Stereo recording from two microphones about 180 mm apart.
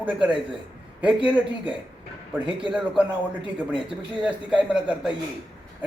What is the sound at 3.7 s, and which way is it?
Speech, 25° right (ahead or behind).